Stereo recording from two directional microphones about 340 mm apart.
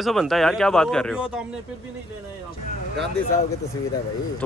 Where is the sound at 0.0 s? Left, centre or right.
Centre.